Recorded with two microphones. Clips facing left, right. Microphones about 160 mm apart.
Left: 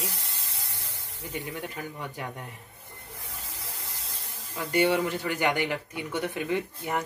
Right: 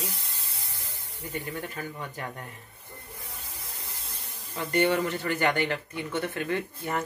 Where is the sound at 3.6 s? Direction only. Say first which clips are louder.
Left 2 dB; 90° left.